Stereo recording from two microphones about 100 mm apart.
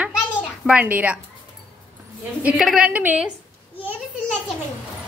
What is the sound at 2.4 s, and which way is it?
Speech, 5° right (ahead or behind).